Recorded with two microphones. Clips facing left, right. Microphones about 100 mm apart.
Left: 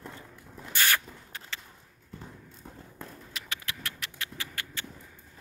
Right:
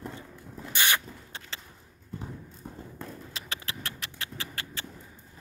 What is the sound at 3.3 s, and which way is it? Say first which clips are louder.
Rodents: right 1 dB; 30° right (ahead or behind).